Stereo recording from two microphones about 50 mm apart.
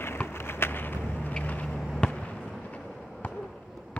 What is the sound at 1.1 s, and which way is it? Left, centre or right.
Vehicle, left.